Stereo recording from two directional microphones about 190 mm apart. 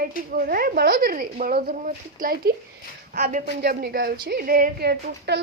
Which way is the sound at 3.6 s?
55° right (ahead or behind).